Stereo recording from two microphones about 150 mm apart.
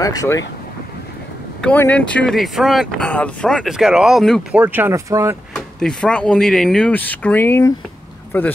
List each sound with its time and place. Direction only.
0.0 s speech: 20° left (ahead or behind)
1.6 s speech: 10° left (ahead or behind); by 5.4 s 20° right (ahead or behind)
5.8 s speech: 5° left (ahead or behind)